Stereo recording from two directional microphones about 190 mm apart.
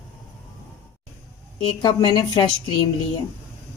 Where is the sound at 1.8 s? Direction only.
20° left (ahead or behind).